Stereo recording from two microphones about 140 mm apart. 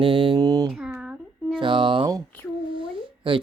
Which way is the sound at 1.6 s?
35° right (ahead or behind).